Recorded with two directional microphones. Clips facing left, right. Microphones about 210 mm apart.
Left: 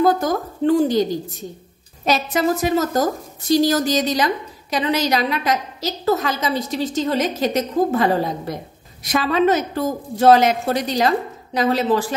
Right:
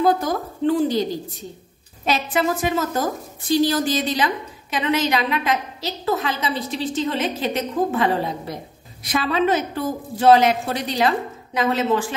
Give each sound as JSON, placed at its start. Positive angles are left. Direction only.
{"t": 0.0, "sound": "a woman's voice", "side_deg": 45}
{"t": 2.0, "sound": "a woman's voice", "side_deg": 40}